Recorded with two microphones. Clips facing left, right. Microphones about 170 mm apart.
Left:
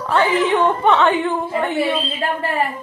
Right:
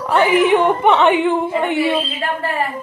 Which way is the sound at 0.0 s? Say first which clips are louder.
Right 3 dB; 15° right (ahead or behind).